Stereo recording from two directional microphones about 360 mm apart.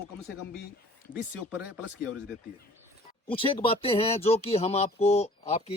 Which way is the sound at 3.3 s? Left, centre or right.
Centre.